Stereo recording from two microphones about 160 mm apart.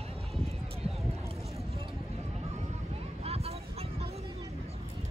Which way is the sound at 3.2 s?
40° right (ahead or behind).